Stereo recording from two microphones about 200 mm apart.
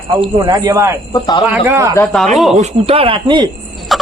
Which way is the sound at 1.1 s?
20° left (ahead or behind).